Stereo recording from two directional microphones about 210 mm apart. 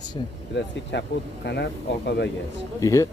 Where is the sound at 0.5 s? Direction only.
55° left (ahead or behind).